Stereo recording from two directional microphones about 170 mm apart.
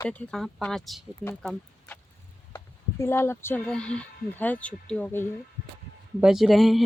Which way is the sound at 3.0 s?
15° left (ahead or behind).